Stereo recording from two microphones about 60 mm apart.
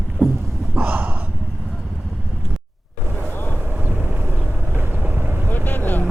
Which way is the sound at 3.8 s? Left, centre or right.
Right.